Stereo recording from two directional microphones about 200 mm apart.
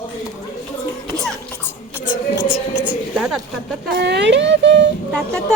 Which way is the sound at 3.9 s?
60° right (ahead or behind).